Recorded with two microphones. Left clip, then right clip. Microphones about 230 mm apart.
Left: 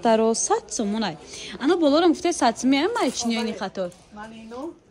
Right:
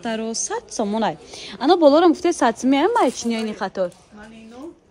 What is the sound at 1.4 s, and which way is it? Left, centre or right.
Speech, centre.